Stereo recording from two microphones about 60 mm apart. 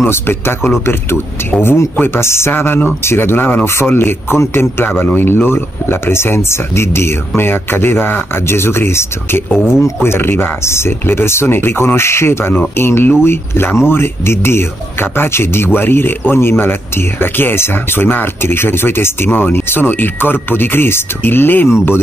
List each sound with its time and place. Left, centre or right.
0.0 s a man's voice: left